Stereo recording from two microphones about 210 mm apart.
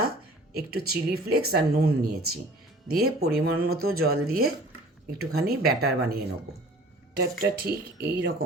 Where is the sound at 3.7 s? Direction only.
90° right.